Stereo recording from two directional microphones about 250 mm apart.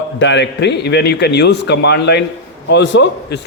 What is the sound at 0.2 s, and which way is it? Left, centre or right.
A man's voice, left.